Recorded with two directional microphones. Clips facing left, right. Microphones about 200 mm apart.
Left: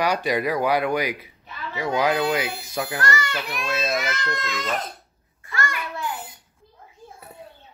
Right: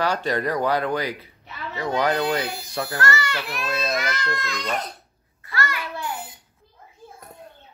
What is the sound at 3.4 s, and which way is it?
Speech, centre (ahead or behind).